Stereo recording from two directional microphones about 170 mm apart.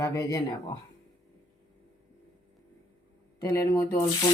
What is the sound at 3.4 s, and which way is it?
Speech, 15° left (ahead or behind).